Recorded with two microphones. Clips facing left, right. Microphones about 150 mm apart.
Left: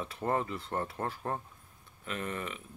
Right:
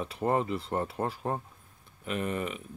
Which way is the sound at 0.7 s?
15° right (ahead or behind).